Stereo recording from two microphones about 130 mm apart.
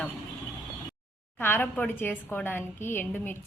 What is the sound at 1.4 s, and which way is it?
A woman's voice, 15° left (ahead or behind).